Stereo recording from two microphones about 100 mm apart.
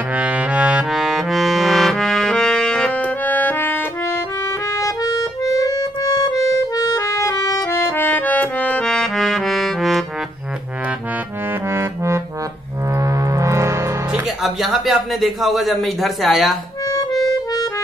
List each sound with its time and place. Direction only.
0.1 s accordion: 15° right (ahead or behind)
11.7 s music: 25° right (ahead or behind)
14.2 s speech: centre (ahead or behind)
17.3 s music: 40° left (ahead or behind)